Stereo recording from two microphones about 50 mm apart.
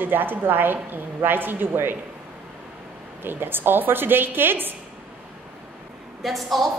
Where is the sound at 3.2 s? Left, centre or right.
Right.